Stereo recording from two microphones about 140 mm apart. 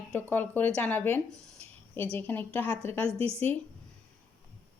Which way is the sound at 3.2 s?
45° right (ahead or behind).